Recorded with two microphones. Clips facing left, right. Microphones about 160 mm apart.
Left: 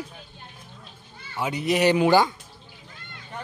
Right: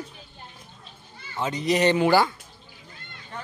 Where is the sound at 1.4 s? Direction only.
10° left (ahead or behind).